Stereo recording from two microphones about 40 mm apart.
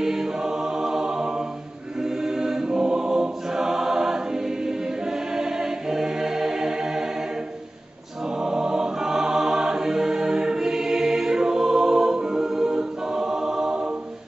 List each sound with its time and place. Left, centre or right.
0.0 s choir: centre
8.4 s choir: centre